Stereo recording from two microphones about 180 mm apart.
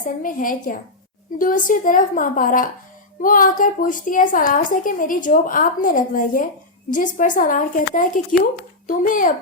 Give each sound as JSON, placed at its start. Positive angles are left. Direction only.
{"t": 0.0, "sound": "a woman's voice", "side_deg": 50}